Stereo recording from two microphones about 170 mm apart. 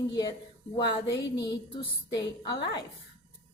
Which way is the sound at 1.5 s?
25° left (ahead or behind).